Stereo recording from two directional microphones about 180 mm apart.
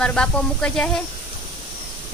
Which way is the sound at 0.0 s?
5° left (ahead or behind).